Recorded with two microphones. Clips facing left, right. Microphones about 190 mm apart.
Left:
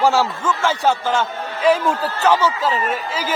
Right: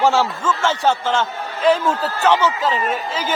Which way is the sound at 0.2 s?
10° left (ahead or behind).